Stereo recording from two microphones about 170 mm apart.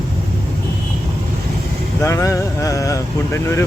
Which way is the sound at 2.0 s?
15° left (ahead or behind).